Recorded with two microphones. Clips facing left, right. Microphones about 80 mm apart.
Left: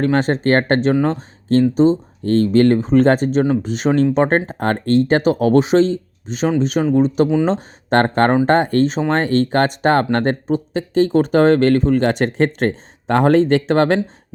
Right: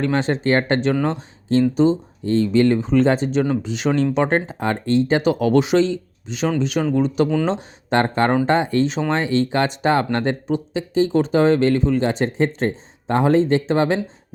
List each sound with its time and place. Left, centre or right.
0.0 s speech: left
2.2 s speech: left